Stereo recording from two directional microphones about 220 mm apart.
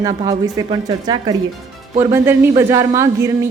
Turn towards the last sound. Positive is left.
turn(degrees=-15)  # may be behind; listen again after turning